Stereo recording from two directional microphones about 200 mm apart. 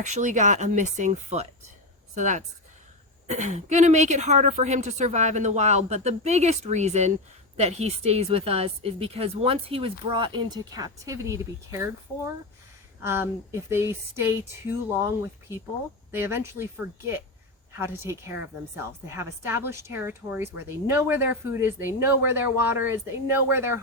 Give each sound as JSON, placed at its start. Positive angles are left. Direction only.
{"t": 0.0, "sound": "a woman's voice", "side_deg": -35}
{"t": 13.0, "sound": "speech", "side_deg": -10}
{"t": 17.7, "sound": "speech", "side_deg": -15}